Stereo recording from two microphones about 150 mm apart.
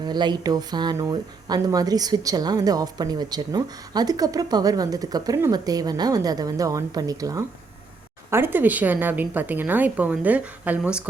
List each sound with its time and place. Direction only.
0.0 s a woman's voice: 30° right (ahead or behind); by 11.1 s 10° right (ahead or behind)